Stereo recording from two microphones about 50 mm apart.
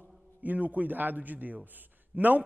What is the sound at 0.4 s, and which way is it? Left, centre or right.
A man's voice, right.